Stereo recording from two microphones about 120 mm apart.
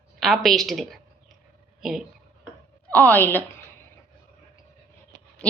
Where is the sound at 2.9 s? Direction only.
15° left (ahead or behind).